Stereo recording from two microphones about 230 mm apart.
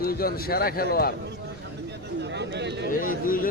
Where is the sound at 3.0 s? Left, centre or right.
Left.